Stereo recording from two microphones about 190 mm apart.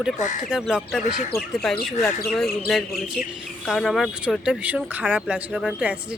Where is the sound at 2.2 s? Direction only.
5° left (ahead or behind).